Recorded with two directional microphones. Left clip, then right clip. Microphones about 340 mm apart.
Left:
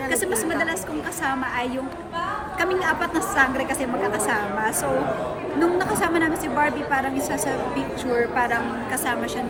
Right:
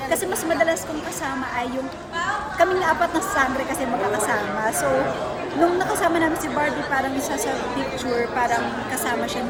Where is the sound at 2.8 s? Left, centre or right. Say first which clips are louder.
Right 2 dB; centre.